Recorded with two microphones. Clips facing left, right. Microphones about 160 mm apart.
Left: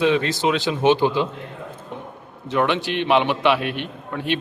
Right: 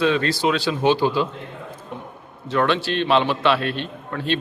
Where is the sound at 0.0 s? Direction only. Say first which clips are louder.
Left 1 dB; 20° left (ahead or behind).